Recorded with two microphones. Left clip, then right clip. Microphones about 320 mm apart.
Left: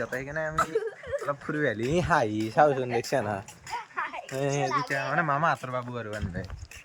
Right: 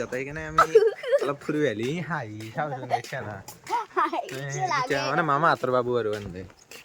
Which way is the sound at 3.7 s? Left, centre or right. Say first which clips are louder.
Right 8 dB; centre.